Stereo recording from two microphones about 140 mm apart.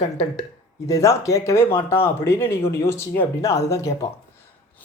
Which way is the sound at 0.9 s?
25° left (ahead or behind).